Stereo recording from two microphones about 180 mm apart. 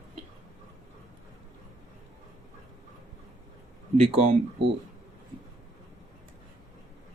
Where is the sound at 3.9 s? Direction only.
35° right (ahead or behind).